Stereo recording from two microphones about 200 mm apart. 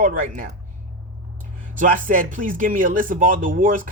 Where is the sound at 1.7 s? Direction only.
40° right (ahead or behind).